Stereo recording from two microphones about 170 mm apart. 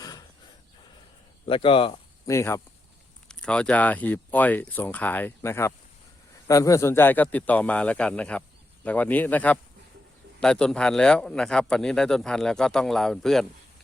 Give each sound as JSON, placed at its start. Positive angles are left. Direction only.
{"t": 1.5, "sound": "speech", "side_deg": 30}
{"t": 2.2, "sound": "speech", "side_deg": 15}
{"t": 3.2, "sound": "speech", "side_deg": 5}